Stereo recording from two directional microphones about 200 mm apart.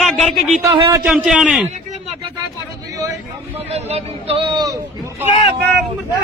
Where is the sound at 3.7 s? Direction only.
30° right (ahead or behind).